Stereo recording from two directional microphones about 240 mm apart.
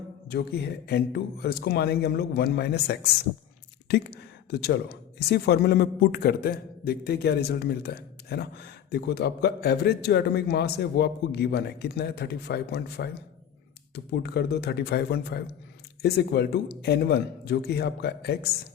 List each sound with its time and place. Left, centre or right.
0.3 s speech: left